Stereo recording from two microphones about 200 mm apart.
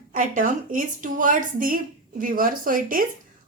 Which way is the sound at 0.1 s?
40° right (ahead or behind).